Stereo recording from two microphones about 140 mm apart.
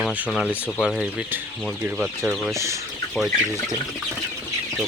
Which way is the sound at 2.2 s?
10° right (ahead or behind).